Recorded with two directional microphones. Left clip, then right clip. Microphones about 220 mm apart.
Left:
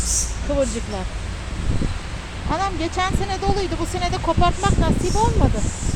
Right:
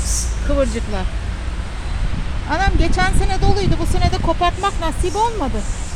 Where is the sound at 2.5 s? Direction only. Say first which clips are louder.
Right 4 dB; 15° right (ahead or behind).